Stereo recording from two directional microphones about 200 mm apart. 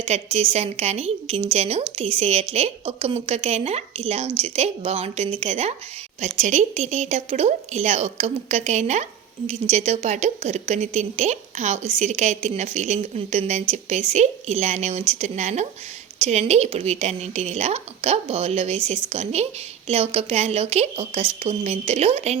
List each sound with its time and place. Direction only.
0.0 s a woman's voice: 30° right (ahead or behind)